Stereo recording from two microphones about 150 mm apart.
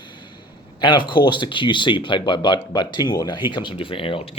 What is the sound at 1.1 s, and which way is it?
Speech, 30° left (ahead or behind).